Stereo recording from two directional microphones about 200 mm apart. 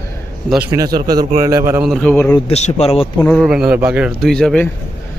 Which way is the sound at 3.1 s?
5° left (ahead or behind).